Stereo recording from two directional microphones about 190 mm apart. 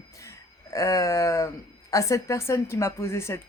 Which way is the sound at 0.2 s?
15° left (ahead or behind).